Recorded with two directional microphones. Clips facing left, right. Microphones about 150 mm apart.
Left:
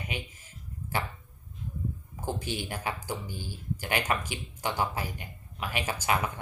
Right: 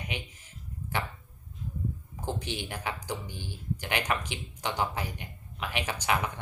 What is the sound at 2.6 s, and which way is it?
Speech, 10° left (ahead or behind).